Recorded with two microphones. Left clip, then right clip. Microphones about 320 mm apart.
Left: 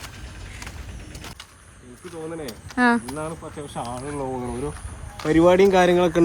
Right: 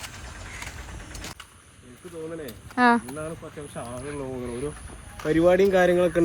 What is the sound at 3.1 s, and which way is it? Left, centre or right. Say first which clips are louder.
Speech: left 4 dB; centre.